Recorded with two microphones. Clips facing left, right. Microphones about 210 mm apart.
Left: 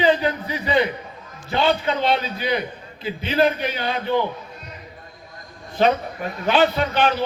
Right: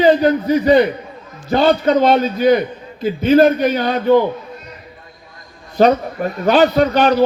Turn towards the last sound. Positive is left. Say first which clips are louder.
# right 8 dB
turn(degrees=-40)  # may be behind; listen again after turning